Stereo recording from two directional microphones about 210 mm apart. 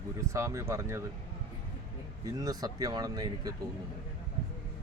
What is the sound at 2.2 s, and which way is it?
Speech, 15° right (ahead or behind).